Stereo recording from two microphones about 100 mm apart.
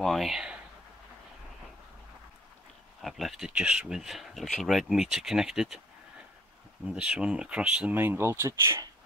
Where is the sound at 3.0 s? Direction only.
Centre (ahead or behind).